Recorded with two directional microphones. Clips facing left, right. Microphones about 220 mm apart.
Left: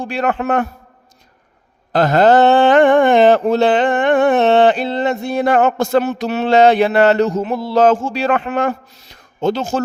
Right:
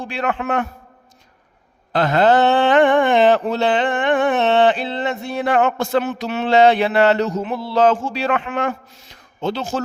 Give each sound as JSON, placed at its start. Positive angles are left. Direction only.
{"t": 0.0, "sound": "a man's voice", "side_deg": 45}
{"t": 1.9, "sound": "mantra", "side_deg": 40}